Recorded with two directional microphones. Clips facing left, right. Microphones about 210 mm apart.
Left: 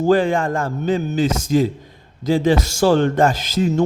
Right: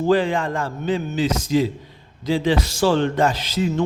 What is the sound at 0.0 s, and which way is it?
Speech, 45° left (ahead or behind).